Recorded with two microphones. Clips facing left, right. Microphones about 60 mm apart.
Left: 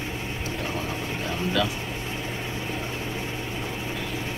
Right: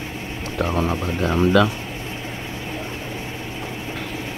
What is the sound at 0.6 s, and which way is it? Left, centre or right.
Speech, right.